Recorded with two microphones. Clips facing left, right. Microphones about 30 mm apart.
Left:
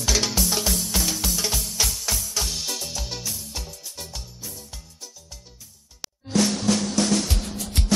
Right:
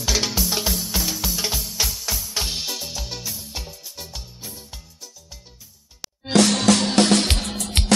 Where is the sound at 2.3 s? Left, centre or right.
Right.